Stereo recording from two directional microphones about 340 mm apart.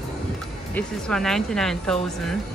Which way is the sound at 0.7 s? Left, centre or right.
Centre.